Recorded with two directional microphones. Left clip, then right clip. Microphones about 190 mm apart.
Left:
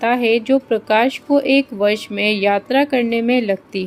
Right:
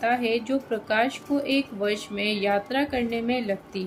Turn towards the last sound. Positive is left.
turn(degrees=40)  # may be behind; listen again after turning